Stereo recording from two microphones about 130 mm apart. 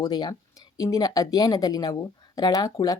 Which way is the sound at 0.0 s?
30° left (ahead or behind).